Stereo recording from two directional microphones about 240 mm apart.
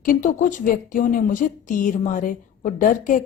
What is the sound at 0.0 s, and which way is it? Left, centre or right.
A woman's voice, left.